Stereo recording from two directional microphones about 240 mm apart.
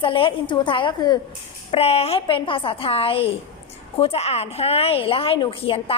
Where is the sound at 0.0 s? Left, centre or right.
Left.